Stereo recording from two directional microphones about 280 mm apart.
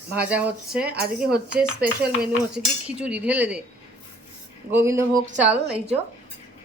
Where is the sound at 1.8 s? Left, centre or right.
Right.